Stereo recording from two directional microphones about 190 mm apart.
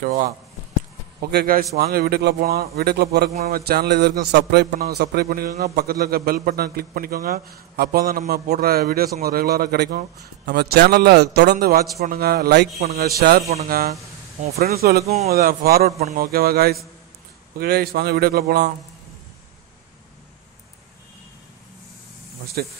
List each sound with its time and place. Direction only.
0.0 s a man's voice: 45° right (ahead or behind)
1.3 s a man's voice: 50° right (ahead or behind)
15.0 s speech: 35° right (ahead or behind)
15.3 s a man's voice: 55° right (ahead or behind)
22.6 s a man's voice: 55° right (ahead or behind)